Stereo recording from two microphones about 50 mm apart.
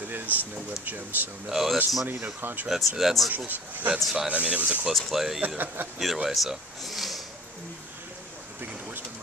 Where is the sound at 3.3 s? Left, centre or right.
Right.